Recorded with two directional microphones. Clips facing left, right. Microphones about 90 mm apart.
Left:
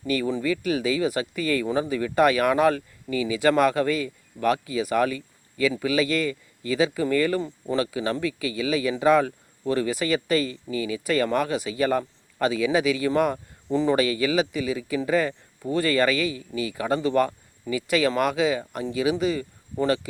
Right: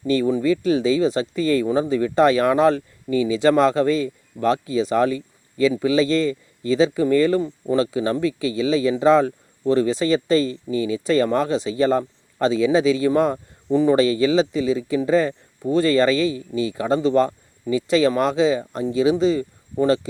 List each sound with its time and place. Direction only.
0.1 s speech: 20° right (ahead or behind)